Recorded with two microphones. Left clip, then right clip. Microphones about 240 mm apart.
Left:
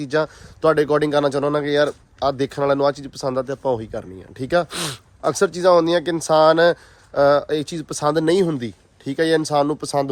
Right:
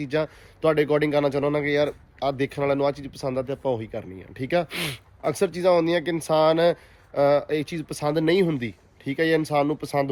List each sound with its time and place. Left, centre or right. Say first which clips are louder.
0.0 s speech: left 5 dB; centre